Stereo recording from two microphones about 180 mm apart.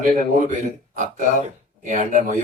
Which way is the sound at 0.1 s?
45° right (ahead or behind).